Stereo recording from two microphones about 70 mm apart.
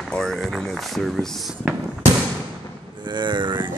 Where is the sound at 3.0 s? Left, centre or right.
Right.